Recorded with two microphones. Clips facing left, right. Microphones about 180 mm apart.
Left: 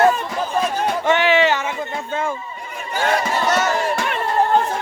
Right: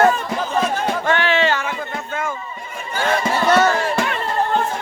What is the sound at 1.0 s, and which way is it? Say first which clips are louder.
Music: left 3 dB; 15° left (ahead or behind).